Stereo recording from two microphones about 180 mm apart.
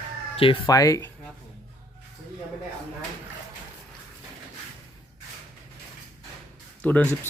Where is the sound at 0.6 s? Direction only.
20° left (ahead or behind).